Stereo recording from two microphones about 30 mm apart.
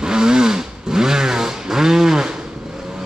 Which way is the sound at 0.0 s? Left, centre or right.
Right.